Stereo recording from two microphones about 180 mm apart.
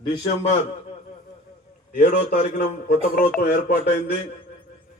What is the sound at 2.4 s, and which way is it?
A man's voice, 40° left (ahead or behind).